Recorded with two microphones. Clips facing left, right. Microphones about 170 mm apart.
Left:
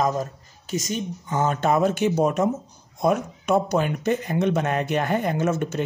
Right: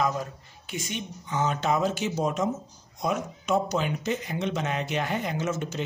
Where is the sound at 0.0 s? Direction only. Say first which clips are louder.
Left 4 dB; 40° left (ahead or behind).